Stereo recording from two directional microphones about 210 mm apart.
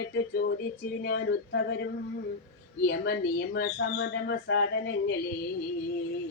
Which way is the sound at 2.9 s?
50° left (ahead or behind).